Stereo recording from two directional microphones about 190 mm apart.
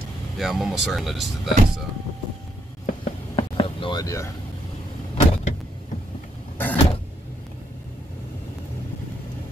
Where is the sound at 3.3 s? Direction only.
30° left (ahead or behind).